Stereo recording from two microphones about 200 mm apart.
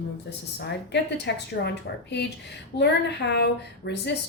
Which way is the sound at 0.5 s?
60° left (ahead or behind).